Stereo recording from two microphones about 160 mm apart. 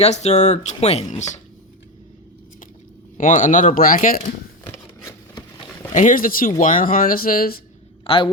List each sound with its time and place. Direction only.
0.0 s speech: 40° left (ahead or behind)
3.2 s speech: 55° left (ahead or behind)
4.6 s a sound: 20° left (ahead or behind)
5.9 s speech: 55° left (ahead or behind)
8.0 s a man's voice: 35° left (ahead or behind)